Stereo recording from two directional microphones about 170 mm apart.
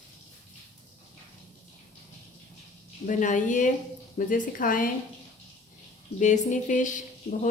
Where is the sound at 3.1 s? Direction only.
50° left (ahead or behind).